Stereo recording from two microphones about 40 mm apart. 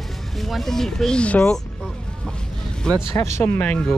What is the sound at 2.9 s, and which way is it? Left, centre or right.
Speech, centre.